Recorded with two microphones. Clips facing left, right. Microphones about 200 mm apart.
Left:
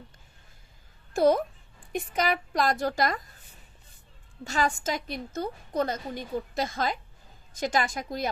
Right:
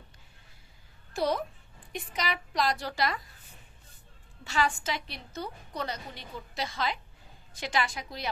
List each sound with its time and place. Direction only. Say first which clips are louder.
1.1 s a child's voice: left 7 dB; 50° left (ahead or behind)
4.5 s a woman's voice: left 2 dB; 45° left (ahead or behind)